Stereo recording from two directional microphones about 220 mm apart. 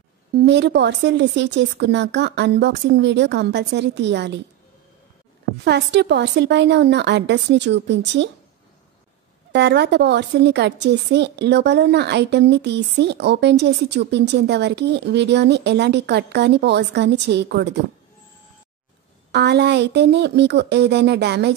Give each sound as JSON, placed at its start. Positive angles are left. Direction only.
{"t": 0.4, "sound": "a woman's voice", "side_deg": -50}
{"t": 5.6, "sound": "a woman's voice", "side_deg": -50}
{"t": 9.5, "sound": "a woman's voice", "side_deg": -50}
{"t": 19.3, "sound": "a woman's voice", "side_deg": -50}